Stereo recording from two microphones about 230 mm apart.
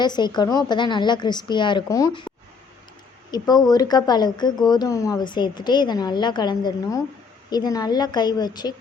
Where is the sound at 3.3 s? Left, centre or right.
Centre.